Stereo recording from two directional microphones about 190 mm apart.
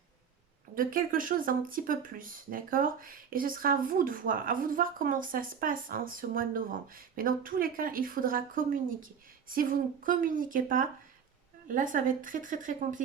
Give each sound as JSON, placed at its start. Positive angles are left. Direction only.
{"t": 0.8, "sound": "speech", "side_deg": -45}